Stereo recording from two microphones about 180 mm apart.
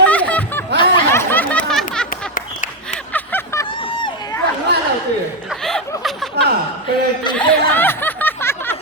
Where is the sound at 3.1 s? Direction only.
10° left (ahead or behind).